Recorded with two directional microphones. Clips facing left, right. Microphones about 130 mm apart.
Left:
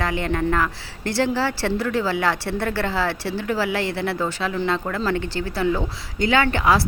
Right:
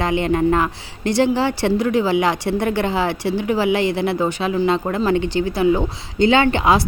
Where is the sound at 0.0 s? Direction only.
20° right (ahead or behind).